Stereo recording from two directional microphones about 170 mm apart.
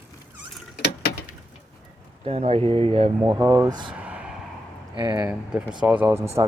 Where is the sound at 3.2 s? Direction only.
25° right (ahead or behind).